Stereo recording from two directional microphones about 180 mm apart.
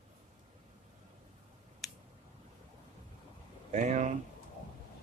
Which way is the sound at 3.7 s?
45° right (ahead or behind).